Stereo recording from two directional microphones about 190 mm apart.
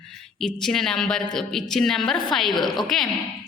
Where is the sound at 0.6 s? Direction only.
Centre (ahead or behind).